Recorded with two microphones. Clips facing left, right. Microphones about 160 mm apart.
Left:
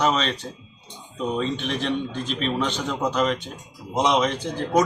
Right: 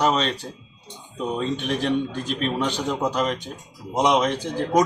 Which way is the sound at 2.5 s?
5° right (ahead or behind).